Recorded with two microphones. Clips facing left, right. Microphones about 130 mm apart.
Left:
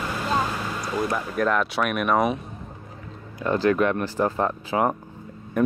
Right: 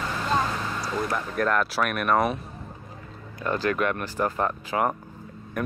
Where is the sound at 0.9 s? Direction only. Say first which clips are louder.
Left 3 dB; 5° left (ahead or behind).